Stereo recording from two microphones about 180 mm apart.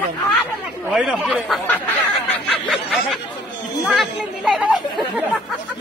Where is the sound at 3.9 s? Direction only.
Centre (ahead or behind).